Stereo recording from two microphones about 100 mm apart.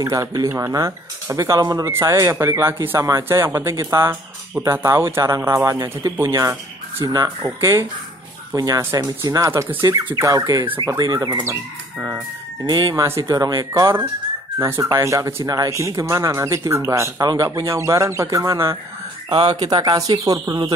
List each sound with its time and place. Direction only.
0.0 s speech: 35° right (ahead or behind)
1.9 s speech: 30° right (ahead or behind); by 11.4 s 45° right (ahead or behind)
12.6 s speech: 40° right (ahead or behind)
14.6 s speech: 30° right (ahead or behind)
17.2 s speech: 40° right (ahead or behind)
19.5 s speech: 45° right (ahead or behind)